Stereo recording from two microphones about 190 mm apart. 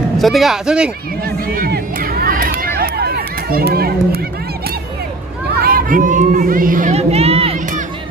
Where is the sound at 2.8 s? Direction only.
55° right (ahead or behind).